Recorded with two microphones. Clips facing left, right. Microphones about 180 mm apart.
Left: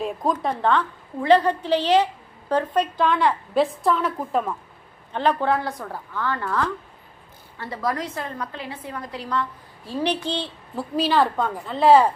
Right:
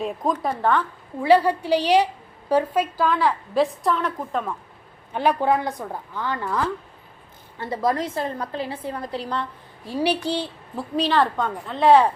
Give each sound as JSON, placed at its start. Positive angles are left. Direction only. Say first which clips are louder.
{"t": 0.0, "sound": "a woman's voice", "louder": "even", "side_deg": 0}
{"t": 5.1, "sound": "a woman's voice", "louder": "right 1 dB", "side_deg": -10}
{"t": 9.8, "sound": "a woman's voice", "louder": "right 2 dB", "side_deg": -10}
{"t": 10.8, "sound": "a woman's voice", "louder": "even", "side_deg": 5}